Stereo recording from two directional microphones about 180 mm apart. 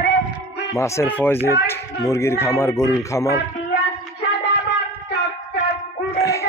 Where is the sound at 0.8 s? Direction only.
15° left (ahead or behind).